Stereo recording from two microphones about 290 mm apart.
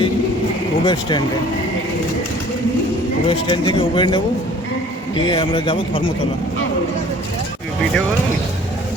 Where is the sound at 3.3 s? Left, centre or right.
Centre.